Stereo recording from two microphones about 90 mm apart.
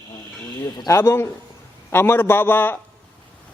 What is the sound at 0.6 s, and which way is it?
Speech, 45° left (ahead or behind).